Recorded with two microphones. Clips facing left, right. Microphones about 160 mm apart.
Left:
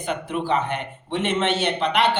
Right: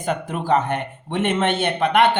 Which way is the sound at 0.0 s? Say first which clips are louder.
Right 1 dB; 45° right (ahead or behind).